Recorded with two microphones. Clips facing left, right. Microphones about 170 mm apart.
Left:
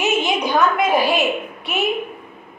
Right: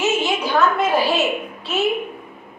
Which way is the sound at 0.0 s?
15° left (ahead or behind).